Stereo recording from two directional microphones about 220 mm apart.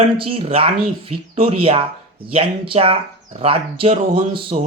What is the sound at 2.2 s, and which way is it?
Speech, 25° right (ahead or behind).